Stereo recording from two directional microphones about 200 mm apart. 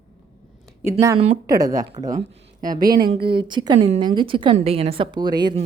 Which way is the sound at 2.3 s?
45° right (ahead or behind).